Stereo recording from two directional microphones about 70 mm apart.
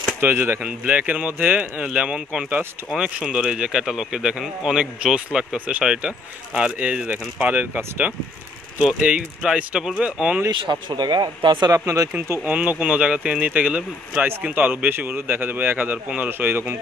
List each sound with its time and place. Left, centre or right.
0.2 s speech: right
0.6 s speech: centre
9.4 s speech: centre
10.5 s speech: right
11.7 s speech: right
12.4 s speech: right